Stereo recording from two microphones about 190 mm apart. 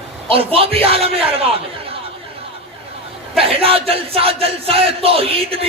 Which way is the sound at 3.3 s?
30° right (ahead or behind).